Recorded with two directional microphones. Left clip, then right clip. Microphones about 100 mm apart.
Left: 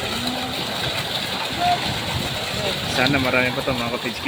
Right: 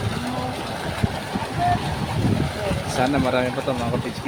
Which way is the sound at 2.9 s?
5° right (ahead or behind).